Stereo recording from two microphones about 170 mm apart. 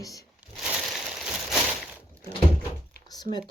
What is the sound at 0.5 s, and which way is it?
Crushing, centre (ahead or behind).